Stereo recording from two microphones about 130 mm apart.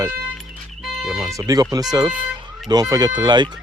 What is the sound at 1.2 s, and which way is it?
Speech, 25° right (ahead or behind).